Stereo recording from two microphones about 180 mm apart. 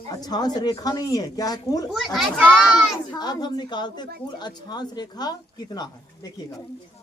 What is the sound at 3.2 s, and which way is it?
A woman's voice, 25° left (ahead or behind).